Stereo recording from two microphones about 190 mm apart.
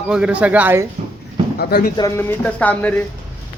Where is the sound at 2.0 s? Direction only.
10° left (ahead or behind).